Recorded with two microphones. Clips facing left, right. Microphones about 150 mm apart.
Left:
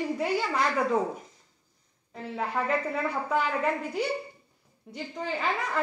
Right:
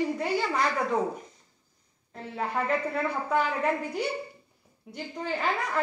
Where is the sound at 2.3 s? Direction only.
Centre (ahead or behind).